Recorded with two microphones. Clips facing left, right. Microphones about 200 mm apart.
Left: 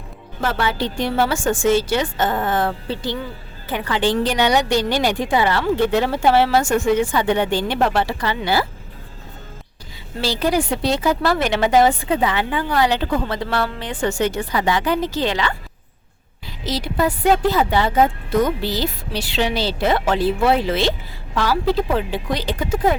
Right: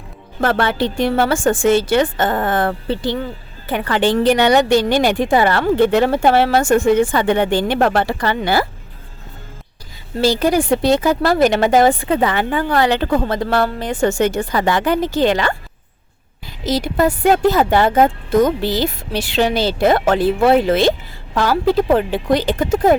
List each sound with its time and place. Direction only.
0.4 s a woman's voice: 55° right (ahead or behind)
10.2 s a woman's voice: 45° right (ahead or behind)
16.6 s a woman's voice: 45° right (ahead or behind)